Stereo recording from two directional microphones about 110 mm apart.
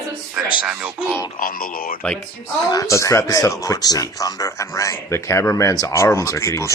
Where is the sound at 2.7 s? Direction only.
30° left (ahead or behind).